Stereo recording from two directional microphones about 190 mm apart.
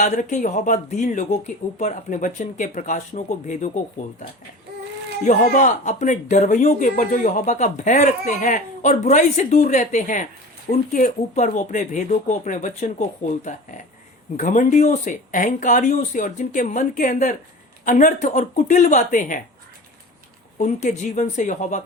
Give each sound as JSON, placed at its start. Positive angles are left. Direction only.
{"t": 0.0, "sound": "speech", "side_deg": 40}
{"t": 5.2, "sound": "speech", "side_deg": 45}
{"t": 20.6, "sound": "speech", "side_deg": 40}